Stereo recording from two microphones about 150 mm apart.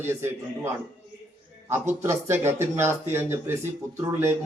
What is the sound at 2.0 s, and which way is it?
Speech, 15° right (ahead or behind).